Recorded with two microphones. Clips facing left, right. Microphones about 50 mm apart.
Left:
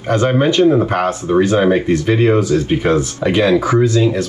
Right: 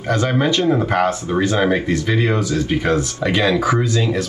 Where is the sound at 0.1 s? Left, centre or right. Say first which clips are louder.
Left 4 dB; left.